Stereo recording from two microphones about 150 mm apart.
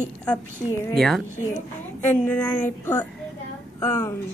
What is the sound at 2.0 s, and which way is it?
Speech, 15° left (ahead or behind).